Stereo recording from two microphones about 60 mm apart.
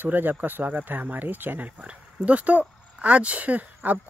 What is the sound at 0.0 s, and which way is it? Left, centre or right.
Speech, right.